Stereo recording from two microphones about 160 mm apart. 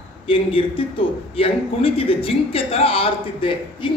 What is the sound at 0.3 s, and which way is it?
A man's voice, 35° left (ahead or behind).